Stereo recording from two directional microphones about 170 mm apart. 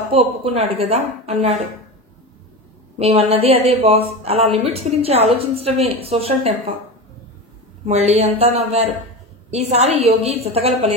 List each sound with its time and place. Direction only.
0.1 s a woman's voice: 35° right (ahead or behind)
3.0 s a woman's voice: 35° right (ahead or behind)
7.8 s a woman's voice: 40° right (ahead or behind)